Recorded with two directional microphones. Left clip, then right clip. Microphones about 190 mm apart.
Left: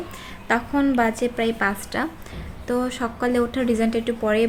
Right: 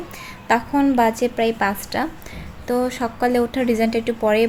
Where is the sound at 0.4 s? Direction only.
10° right (ahead or behind).